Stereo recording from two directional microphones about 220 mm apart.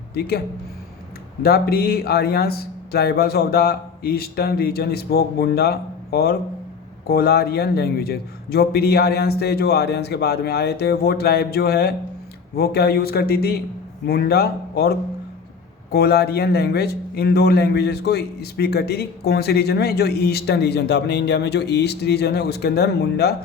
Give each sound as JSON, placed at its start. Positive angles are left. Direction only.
{"t": 0.1, "sound": "a man's voice", "side_deg": 45}